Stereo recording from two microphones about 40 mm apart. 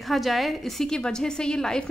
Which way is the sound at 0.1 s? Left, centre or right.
Centre.